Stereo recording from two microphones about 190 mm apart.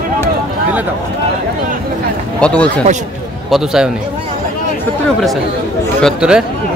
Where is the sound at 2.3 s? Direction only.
5° left (ahead or behind).